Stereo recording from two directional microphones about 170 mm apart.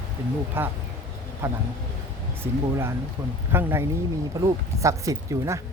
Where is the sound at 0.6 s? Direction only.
10° right (ahead or behind).